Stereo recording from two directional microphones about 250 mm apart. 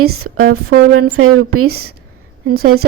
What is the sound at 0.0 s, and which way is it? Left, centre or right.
A woman's voice, right.